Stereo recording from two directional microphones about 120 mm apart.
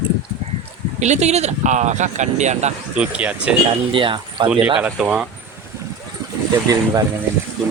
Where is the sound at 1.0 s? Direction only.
70° right (ahead or behind).